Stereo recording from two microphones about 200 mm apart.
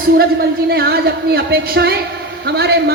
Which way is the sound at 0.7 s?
50° right (ahead or behind).